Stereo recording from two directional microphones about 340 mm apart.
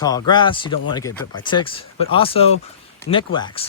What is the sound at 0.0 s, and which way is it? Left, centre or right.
Speech, centre.